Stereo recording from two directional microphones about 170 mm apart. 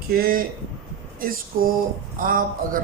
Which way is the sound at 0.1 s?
60° right (ahead or behind).